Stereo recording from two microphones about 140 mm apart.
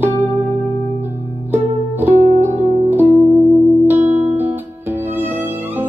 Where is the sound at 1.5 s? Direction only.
15° right (ahead or behind).